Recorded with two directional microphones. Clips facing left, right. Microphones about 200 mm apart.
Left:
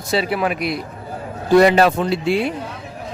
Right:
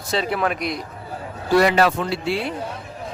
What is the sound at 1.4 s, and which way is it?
A man's voice, 20° left (ahead or behind).